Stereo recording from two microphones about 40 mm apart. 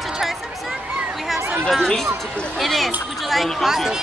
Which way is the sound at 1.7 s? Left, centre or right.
Centre.